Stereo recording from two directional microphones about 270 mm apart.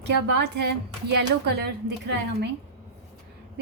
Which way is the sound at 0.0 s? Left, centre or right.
Right.